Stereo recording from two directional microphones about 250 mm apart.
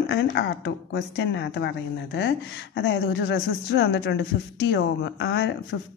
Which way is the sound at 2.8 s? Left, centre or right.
Left.